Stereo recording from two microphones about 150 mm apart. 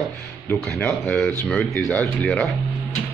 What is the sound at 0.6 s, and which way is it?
Speech, 5° left (ahead or behind).